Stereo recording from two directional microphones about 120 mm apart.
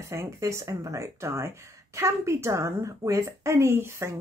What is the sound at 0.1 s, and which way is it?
Speech, 25° right (ahead or behind).